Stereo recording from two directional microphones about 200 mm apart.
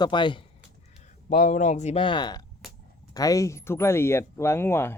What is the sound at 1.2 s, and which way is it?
Speech, 40° left (ahead or behind).